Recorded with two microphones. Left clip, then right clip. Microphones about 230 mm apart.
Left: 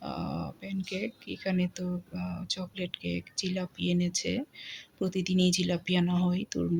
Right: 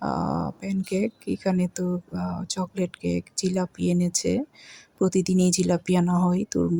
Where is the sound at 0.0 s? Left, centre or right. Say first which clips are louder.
Right 10 dB; right.